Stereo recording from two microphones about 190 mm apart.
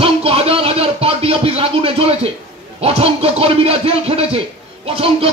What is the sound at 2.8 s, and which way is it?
Speech, 30° right (ahead or behind).